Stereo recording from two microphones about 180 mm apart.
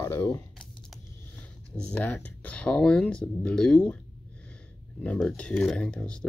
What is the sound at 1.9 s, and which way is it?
Speech, 10° left (ahead or behind).